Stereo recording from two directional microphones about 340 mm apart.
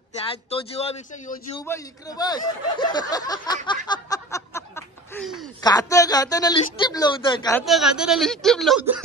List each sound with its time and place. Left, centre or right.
0.5 s speech: centre
7.6 s speech: centre